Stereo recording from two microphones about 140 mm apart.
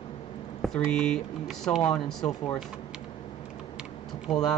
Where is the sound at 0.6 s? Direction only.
5° left (ahead or behind).